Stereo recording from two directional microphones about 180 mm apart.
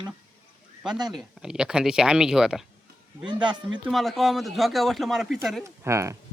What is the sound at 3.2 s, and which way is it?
Speech, 25° right (ahead or behind).